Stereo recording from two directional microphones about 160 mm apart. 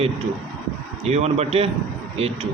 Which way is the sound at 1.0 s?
40° right (ahead or behind).